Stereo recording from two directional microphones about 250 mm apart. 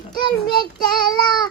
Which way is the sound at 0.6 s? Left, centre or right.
Centre.